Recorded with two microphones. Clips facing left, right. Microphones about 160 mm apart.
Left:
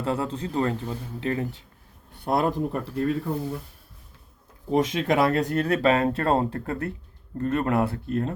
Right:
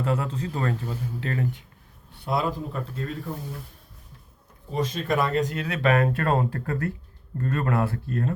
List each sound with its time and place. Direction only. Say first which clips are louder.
0.0 s a man's voice: even; 30° left (ahead or behind)
2.2 s speech: left 3 dB; 55° left (ahead or behind)
4.7 s speech: left 4 dB; 90° left; by 5.8 s 50° left (ahead or behind)
5.8 s a man's voice: right 3 dB; 25° left (ahead or behind)